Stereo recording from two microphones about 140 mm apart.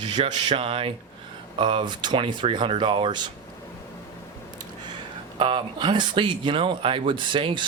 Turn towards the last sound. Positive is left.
turn(degrees=-35)  # may be behind; listen again after turning